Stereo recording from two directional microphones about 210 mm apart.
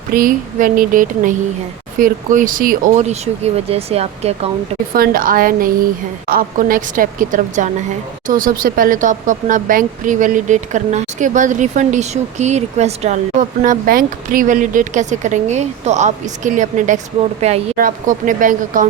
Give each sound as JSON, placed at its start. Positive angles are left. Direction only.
{"t": 0.1, "sound": "speech", "side_deg": -40}
{"t": 4.9, "sound": "speech", "side_deg": -40}